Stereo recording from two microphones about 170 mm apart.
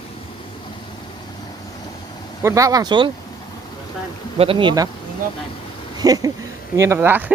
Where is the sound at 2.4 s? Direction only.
15° right (ahead or behind).